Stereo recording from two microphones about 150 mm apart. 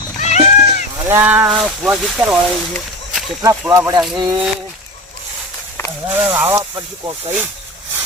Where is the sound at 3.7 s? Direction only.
20° right (ahead or behind).